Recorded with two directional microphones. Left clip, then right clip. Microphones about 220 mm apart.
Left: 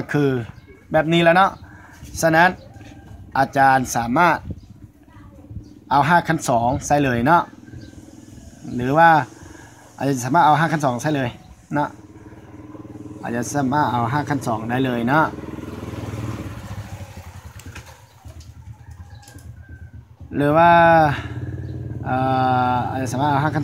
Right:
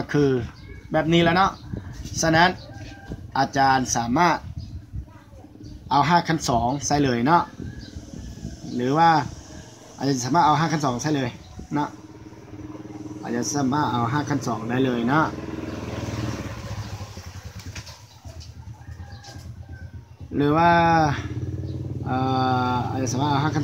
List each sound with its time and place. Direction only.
0.0 s speech: 35° left (ahead or behind)
3.5 s speech: 40° left (ahead or behind)
5.9 s speech: 40° left (ahead or behind)
8.7 s speech: 40° left (ahead or behind)
13.2 s speech: 40° left (ahead or behind)
20.3 s speech: 40° left (ahead or behind)